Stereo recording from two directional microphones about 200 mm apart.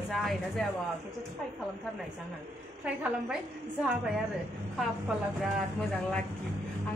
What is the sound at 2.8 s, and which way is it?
Speech, 5° right (ahead or behind).